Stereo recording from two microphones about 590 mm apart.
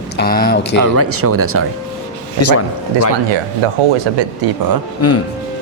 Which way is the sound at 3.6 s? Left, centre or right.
Right.